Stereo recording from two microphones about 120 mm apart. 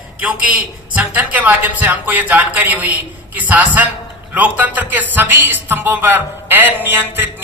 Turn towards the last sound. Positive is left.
turn(degrees=-15)  # may be behind; listen again after turning